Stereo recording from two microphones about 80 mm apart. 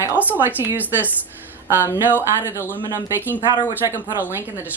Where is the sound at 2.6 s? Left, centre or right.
Left.